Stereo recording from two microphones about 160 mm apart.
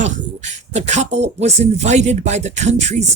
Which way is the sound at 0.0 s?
45° right (ahead or behind).